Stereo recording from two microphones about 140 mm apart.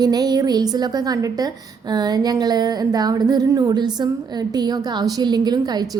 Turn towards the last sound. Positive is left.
turn(degrees=-25)  # may be behind; listen again after turning